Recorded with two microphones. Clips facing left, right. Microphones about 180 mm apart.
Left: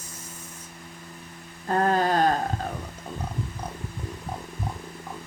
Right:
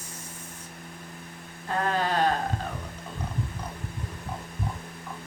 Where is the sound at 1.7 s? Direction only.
45° left (ahead or behind).